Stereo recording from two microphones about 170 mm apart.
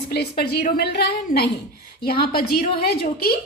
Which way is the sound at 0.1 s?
70° left (ahead or behind).